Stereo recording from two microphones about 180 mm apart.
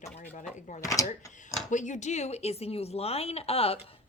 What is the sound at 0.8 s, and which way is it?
Speech, 20° left (ahead or behind).